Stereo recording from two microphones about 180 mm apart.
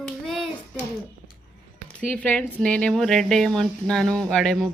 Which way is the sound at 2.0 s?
10° left (ahead or behind).